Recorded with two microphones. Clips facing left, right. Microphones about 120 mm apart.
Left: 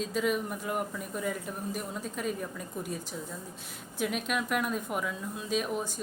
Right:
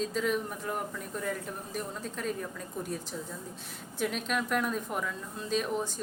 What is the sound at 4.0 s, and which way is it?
A woman's voice, 5° left (ahead or behind).